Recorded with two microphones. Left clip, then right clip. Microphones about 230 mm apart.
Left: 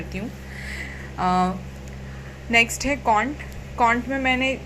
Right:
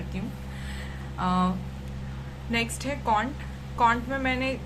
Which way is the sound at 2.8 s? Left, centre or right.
Left.